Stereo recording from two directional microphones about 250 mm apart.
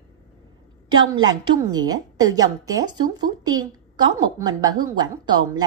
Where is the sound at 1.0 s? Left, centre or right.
Centre.